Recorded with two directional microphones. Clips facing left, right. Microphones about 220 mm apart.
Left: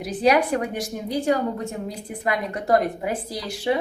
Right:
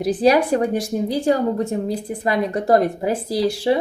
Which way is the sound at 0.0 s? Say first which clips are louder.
Right 4 dB; 35° right (ahead or behind).